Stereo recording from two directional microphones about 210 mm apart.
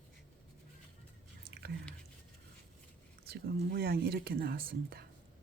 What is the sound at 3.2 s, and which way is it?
Speech, 50° right (ahead or behind).